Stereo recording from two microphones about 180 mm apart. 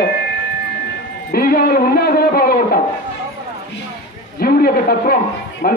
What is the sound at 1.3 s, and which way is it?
A man's voice, 60° left (ahead or behind).